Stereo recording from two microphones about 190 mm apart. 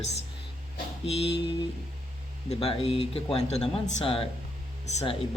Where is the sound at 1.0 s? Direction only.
35° left (ahead or behind).